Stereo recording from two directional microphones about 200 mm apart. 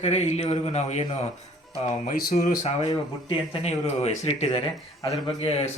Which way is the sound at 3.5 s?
30° left (ahead or behind).